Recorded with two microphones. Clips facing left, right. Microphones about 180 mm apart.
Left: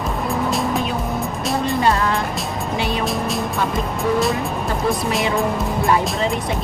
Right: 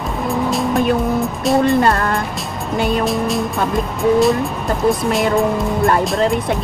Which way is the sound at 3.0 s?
Centre (ahead or behind).